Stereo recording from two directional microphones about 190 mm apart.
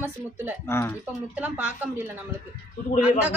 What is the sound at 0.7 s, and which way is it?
Speech, 15° left (ahead or behind).